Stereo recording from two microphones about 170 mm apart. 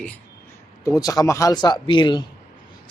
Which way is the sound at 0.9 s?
20° left (ahead or behind).